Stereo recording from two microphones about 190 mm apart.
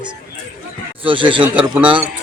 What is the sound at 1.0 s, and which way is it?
Speech, 25° right (ahead or behind).